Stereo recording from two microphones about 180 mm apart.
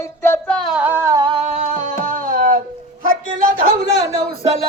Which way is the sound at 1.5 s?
45° right (ahead or behind).